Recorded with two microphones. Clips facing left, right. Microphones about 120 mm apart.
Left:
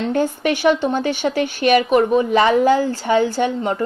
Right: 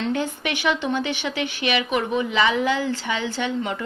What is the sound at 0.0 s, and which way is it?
Speech, 40° left (ahead or behind).